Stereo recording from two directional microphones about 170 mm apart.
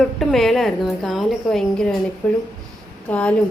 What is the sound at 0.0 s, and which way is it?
A woman's voice, centre (ahead or behind).